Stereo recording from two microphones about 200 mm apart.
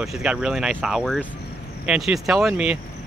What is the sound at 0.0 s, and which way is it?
Speech, 5° right (ahead or behind).